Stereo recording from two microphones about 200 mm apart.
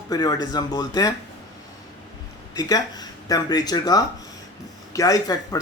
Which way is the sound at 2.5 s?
20° left (ahead or behind).